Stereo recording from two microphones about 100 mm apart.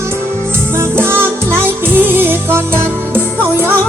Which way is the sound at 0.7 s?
25° right (ahead or behind).